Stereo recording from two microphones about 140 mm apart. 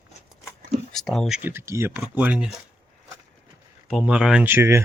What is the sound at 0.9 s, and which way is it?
Speech, centre (ahead or behind).